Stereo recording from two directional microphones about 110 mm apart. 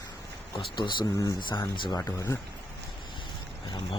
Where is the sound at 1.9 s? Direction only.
30° left (ahead or behind).